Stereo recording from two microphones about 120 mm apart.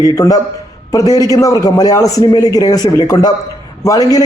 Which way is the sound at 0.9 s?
30° left (ahead or behind).